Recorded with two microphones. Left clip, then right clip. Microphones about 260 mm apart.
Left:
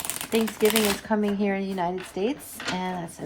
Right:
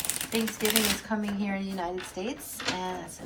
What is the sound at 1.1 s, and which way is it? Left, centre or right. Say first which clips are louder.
Speech: left 7 dB; left.